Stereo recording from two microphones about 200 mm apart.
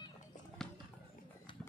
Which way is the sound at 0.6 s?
5° left (ahead or behind).